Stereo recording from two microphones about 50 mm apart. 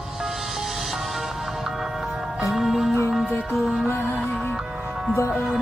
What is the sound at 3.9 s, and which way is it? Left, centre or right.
Music, left.